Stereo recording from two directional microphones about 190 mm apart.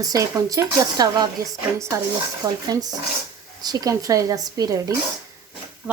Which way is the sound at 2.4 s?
20° right (ahead or behind).